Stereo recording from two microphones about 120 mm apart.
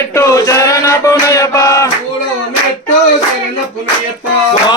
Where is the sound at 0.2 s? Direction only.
25° left (ahead or behind).